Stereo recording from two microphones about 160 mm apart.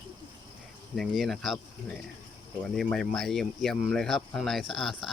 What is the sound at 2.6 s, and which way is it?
Speech, centre (ahead or behind).